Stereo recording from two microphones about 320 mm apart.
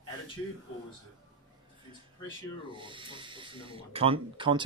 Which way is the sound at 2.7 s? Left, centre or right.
Centre.